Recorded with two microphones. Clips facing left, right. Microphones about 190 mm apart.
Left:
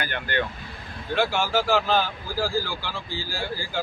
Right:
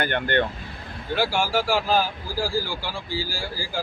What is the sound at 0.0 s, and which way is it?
Speech, 55° right (ahead or behind).